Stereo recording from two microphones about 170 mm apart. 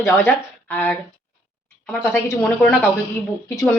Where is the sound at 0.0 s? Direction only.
15° left (ahead or behind).